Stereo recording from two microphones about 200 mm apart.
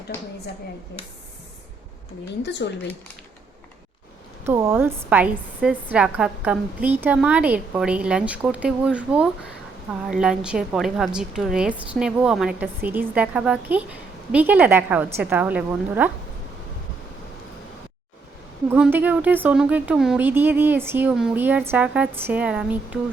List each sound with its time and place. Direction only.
2.4 s speech: 60° left (ahead or behind)
4.4 s a woman's voice: 15° right (ahead or behind)
18.7 s a woman's voice: 10° right (ahead or behind)